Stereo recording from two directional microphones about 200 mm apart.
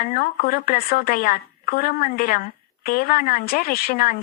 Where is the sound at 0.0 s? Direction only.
45° left (ahead or behind).